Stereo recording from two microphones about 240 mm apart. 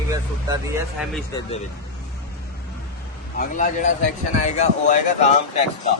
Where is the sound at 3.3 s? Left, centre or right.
Left.